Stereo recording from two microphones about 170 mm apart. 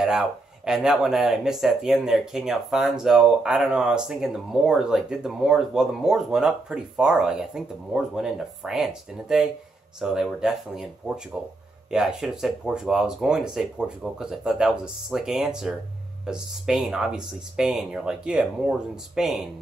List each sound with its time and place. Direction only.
0.0 s speech: 5° right (ahead or behind)